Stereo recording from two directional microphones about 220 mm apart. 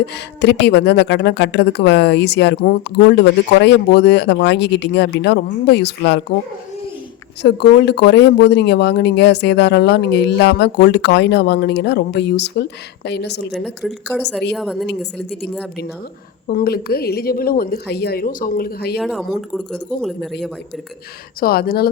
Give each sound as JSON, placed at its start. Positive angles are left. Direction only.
{"t": 0.0, "sound": "speech", "side_deg": 50}
{"t": 7.4, "sound": "speech", "side_deg": 50}
{"t": 13.5, "sound": "speech", "side_deg": 0}
{"t": 16.5, "sound": "speech", "side_deg": 45}
{"t": 18.9, "sound": "speech", "side_deg": 0}
{"t": 21.4, "sound": "speech", "side_deg": 45}